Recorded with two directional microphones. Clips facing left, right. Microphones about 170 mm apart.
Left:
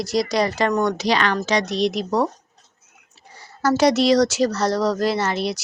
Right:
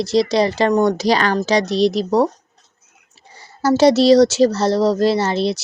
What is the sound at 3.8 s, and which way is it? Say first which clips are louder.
Speech: right 6 dB; 30° right (ahead or behind).